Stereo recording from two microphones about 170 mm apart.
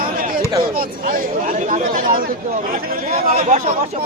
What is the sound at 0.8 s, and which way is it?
Speech, 55° right (ahead or behind).